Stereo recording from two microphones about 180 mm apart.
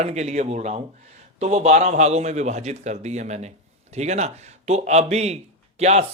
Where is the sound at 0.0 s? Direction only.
40° right (ahead or behind).